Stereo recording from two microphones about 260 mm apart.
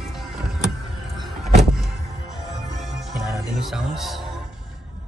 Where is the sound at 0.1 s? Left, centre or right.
Centre.